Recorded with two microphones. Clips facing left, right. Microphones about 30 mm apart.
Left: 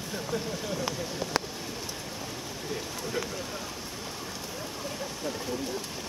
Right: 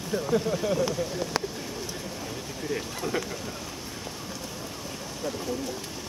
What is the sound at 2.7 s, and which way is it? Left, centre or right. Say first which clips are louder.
Speech: right 5 dB; centre.